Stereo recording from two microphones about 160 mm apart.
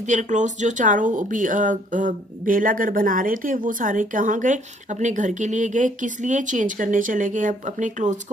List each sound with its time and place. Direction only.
0.1 s speech: 50° right (ahead or behind)